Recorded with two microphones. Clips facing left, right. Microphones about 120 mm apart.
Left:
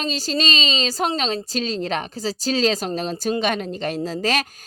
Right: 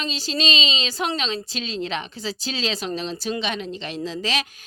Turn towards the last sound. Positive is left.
turn(degrees=45)  # may be behind; listen again after turning